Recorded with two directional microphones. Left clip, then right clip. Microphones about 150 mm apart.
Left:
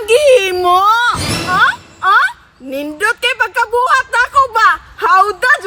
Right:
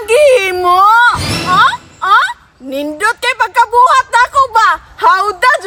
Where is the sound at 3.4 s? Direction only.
30° right (ahead or behind).